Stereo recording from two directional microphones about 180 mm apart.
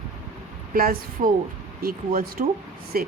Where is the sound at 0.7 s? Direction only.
50° right (ahead or behind).